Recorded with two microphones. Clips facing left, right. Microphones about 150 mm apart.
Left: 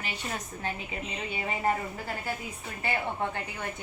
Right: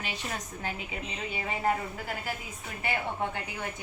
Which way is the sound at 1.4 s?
Centre (ahead or behind).